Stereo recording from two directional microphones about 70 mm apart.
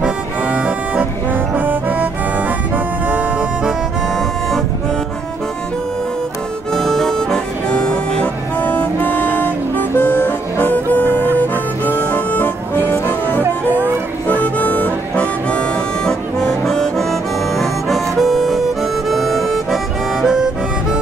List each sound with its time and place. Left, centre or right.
0.0 s accordion: centre
1.5 s music: right
3.1 s music: centre
6.7 s harmonica: centre
7.7 s music: centre; by 13.4 s left
14.2 s harmonica: left
16.1 s music: centre